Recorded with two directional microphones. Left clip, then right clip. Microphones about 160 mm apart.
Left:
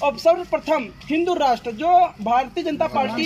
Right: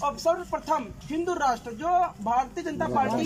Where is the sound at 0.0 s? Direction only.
15° left (ahead or behind).